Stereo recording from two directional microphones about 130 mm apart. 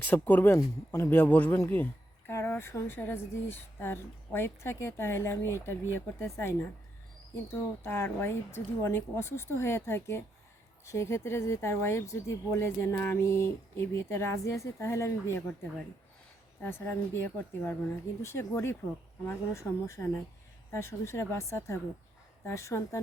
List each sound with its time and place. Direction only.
0.0 s speech: 15° left (ahead or behind)
16.6 s speech: 15° left (ahead or behind)